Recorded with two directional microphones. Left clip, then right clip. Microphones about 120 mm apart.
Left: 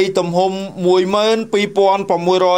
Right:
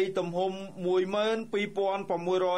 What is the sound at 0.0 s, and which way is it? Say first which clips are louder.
A man's voice: left 14 dB; 25° left (ahead or behind).